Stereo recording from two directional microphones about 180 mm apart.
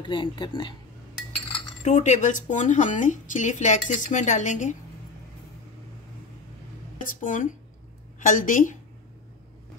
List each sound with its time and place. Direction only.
0.0 s speech: 25° left (ahead or behind)
1.9 s a woman's voice: 40° left (ahead or behind)
7.0 s a woman's voice: 50° left (ahead or behind)